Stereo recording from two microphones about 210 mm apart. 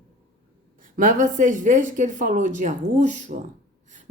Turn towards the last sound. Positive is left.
turn(degrees=-35)  # may be behind; listen again after turning